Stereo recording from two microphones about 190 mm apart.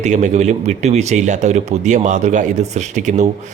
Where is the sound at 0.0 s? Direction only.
40° right (ahead or behind).